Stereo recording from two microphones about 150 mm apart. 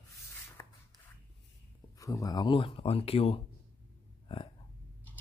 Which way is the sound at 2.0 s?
25° left (ahead or behind).